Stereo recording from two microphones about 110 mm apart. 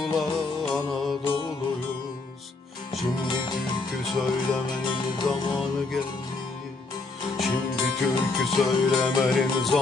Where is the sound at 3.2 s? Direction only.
45° left (ahead or behind).